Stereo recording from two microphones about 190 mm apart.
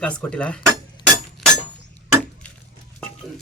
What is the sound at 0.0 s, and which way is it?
Speech, 5° left (ahead or behind).